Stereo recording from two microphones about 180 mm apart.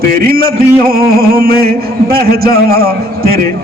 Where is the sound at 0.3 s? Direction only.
55° right (ahead or behind).